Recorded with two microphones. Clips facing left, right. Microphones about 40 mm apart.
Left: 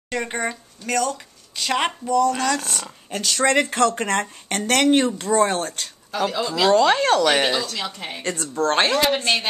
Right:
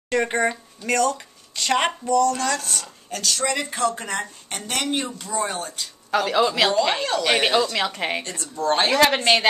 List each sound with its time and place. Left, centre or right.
0.1 s speech: centre
2.8 s speech: left
3.3 s speech: left
6.1 s speech: right
6.7 s speech: left
7.7 s speech: right
8.2 s a woman's voice: left
8.9 s a woman's voice: right